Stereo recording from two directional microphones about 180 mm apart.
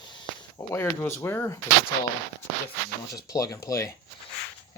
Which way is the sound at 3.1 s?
20° left (ahead or behind).